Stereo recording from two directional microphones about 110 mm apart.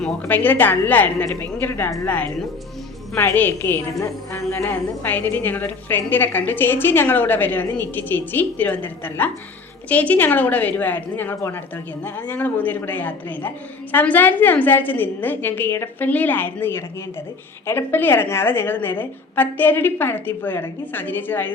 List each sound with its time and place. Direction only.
0.2 s a woman's voice: 15° left (ahead or behind)